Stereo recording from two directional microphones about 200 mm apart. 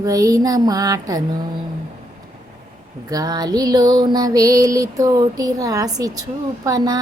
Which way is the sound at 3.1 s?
20° right (ahead or behind).